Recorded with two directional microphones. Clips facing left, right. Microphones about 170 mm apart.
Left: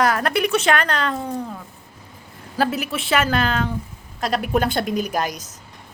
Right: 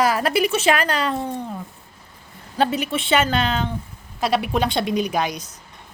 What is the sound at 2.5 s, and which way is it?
Speech, 5° left (ahead or behind).